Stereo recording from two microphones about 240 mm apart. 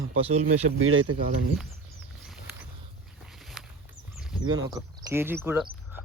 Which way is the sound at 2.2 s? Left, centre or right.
Centre.